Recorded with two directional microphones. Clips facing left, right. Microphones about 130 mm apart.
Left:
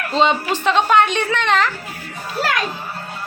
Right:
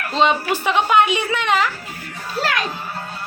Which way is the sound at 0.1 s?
Centre (ahead or behind).